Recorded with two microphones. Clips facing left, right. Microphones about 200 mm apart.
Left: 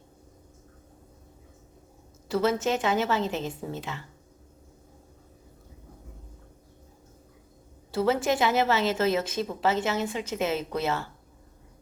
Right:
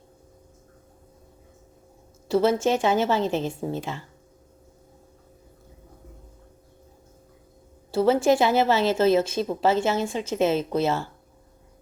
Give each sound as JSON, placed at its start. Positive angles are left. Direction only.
{"t": 2.2, "sound": "a woman's voice", "side_deg": -30}
{"t": 7.9, "sound": "a woman's voice", "side_deg": -30}